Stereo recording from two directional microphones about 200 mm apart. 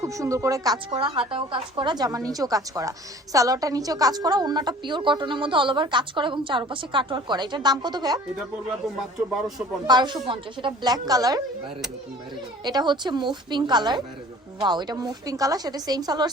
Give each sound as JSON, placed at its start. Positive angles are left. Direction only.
{"t": 0.0, "sound": "a woman's voice", "side_deg": -15}
{"t": 9.8, "sound": "a woman's voice", "side_deg": -20}
{"t": 12.6, "sound": "a woman's voice", "side_deg": -20}